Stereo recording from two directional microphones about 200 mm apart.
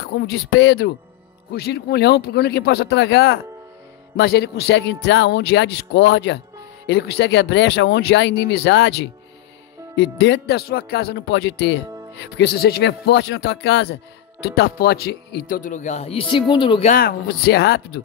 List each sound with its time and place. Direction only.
0.0 s speech: 60° left (ahead or behind); by 16.9 s 25° left (ahead or behind)
16.9 s speech: 50° left (ahead or behind)